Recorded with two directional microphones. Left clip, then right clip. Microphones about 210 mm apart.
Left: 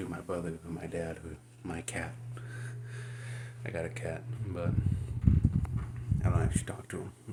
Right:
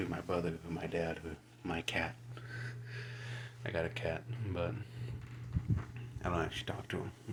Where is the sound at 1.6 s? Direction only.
20° left (ahead or behind).